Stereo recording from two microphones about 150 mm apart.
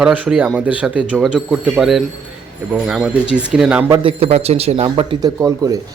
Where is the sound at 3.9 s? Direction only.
35° right (ahead or behind).